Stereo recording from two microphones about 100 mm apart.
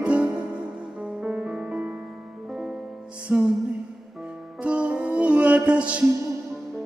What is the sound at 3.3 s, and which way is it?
Music, 15° right (ahead or behind).